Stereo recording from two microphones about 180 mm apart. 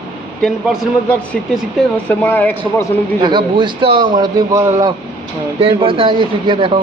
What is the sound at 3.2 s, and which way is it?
A man's voice, 25° right (ahead or behind).